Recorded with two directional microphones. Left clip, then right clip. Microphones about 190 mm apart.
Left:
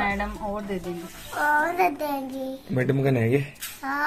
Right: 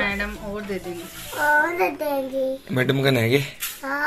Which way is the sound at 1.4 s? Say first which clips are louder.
Right 2 dB; 25° left (ahead or behind).